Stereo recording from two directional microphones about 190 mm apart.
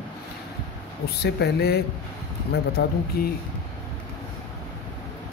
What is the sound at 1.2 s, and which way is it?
Speech, 55° left (ahead or behind).